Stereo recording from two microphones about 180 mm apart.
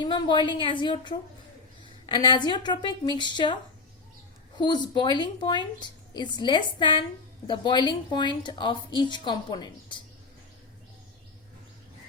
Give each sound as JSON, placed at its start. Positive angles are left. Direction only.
{"t": 0.0, "sound": "a woman's voice", "side_deg": 25}